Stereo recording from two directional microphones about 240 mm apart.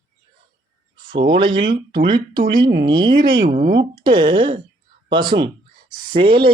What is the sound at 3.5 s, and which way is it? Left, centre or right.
Speech, right.